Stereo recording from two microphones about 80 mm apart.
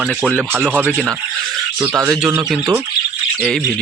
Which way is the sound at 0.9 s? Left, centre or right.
Centre.